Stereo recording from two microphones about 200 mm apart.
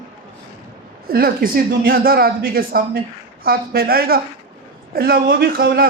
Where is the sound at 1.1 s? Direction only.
50° right (ahead or behind).